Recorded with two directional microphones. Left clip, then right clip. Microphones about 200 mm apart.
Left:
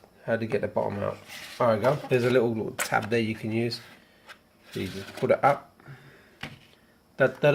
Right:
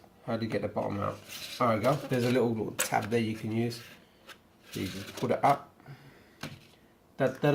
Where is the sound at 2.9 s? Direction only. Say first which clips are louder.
Left 4 dB; 50° left (ahead or behind).